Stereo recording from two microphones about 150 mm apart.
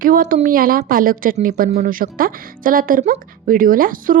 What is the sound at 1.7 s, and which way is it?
A woman's voice, 60° right (ahead or behind).